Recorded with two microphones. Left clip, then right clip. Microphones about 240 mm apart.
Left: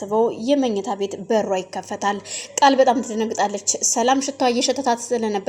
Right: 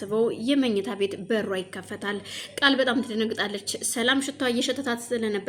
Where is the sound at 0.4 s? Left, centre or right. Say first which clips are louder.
Left 5 dB; centre.